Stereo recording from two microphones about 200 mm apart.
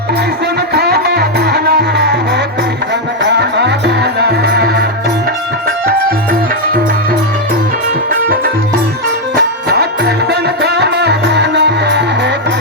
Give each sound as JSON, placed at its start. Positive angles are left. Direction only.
{"t": 0.7, "sound": "music", "side_deg": -50}
{"t": 8.1, "sound": "music", "side_deg": -50}